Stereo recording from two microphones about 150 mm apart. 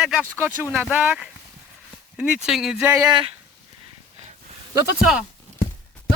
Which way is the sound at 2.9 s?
20° right (ahead or behind).